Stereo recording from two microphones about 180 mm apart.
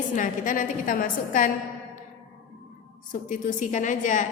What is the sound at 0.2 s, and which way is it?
A woman's voice, 50° left (ahead or behind).